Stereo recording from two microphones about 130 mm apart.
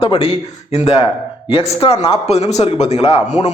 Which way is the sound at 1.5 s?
40° left (ahead or behind).